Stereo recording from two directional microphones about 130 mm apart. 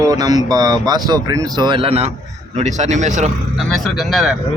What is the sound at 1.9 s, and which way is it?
Speech, 55° right (ahead or behind).